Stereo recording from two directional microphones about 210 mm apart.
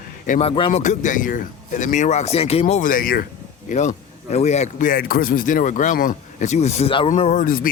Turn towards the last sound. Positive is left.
turn(degrees=40)  # may be behind; listen again after turning